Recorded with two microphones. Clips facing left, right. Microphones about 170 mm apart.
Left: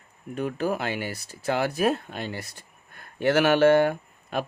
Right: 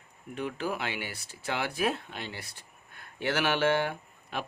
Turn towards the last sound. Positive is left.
turn(degrees=45)  # may be behind; listen again after turning